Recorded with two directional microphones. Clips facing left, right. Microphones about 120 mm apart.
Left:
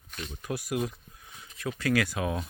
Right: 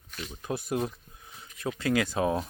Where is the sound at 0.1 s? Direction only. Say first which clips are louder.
Even; centre (ahead or behind).